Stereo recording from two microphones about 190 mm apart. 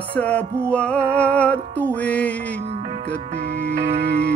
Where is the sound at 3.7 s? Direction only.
60° right (ahead or behind).